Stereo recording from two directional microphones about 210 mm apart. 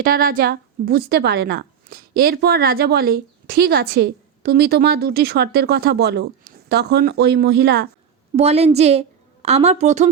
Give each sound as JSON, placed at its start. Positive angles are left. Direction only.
{"t": 0.0, "sound": "speech", "side_deg": -45}
{"t": 8.4, "sound": "a woman's voice", "side_deg": -30}